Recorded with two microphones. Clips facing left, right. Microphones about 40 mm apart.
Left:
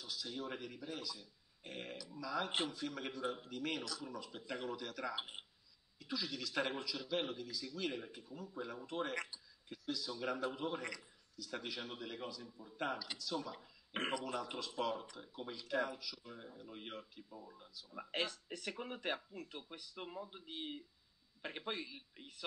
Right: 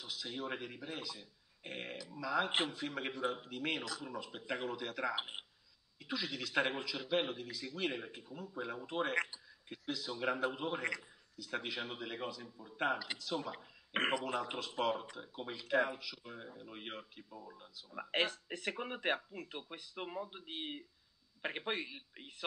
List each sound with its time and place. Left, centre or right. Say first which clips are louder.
0.0 s speech: right 2 dB; right